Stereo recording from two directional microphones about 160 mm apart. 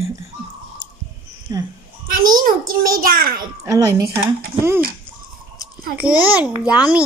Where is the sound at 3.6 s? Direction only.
20° right (ahead or behind).